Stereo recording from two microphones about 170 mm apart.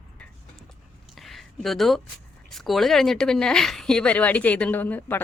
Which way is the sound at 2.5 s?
Centre (ahead or behind).